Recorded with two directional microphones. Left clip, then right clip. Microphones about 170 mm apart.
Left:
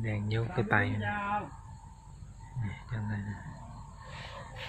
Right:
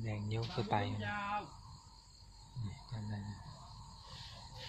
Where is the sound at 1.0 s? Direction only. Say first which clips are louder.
Left 6 dB; 45° left (ahead or behind).